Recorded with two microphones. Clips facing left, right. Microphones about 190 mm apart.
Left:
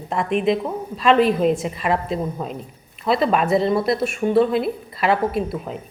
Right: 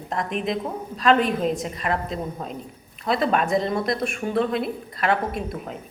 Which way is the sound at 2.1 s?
5° left (ahead or behind).